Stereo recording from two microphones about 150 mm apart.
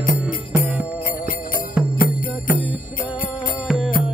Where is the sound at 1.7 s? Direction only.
10° right (ahead or behind).